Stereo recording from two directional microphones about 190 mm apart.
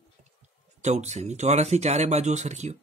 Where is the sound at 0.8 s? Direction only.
35° right (ahead or behind).